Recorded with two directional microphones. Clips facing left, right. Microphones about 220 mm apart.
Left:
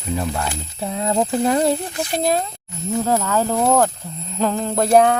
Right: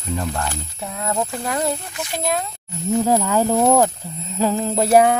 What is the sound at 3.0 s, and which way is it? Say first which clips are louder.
Speech: right 1 dB; 15° right (ahead or behind).